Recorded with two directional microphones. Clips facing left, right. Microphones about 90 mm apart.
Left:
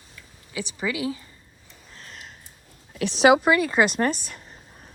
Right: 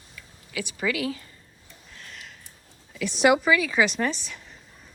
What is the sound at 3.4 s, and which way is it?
Speech, 50° left (ahead or behind).